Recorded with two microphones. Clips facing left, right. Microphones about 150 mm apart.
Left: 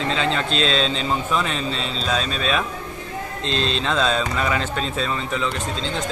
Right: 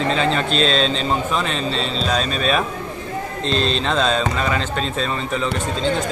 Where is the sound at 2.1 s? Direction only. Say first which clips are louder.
Right 2 dB; 5° right (ahead or behind).